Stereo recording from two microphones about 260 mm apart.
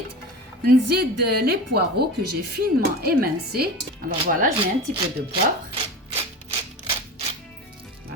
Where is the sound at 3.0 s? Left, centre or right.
Right.